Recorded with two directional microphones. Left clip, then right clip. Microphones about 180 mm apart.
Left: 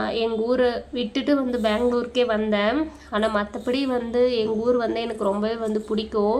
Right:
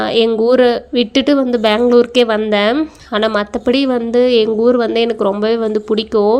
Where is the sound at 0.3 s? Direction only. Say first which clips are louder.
Right 9 dB; 40° right (ahead or behind).